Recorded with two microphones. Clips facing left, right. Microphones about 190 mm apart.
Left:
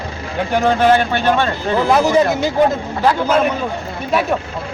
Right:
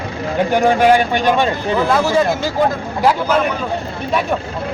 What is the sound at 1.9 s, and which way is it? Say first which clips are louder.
Speech: left 3 dB; 20° left (ahead or behind).